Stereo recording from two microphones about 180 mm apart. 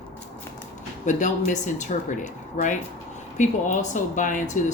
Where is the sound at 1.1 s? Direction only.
45° left (ahead or behind).